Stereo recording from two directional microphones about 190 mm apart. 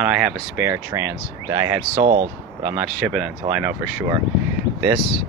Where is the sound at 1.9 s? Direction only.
45° right (ahead or behind).